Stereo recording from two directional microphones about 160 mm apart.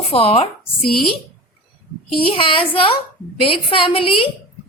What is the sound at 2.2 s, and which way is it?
Speech, 30° left (ahead or behind).